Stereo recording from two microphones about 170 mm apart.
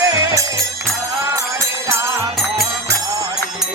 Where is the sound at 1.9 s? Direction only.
15° right (ahead or behind).